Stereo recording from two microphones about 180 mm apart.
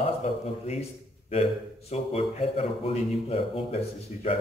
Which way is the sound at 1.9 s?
35° left (ahead or behind).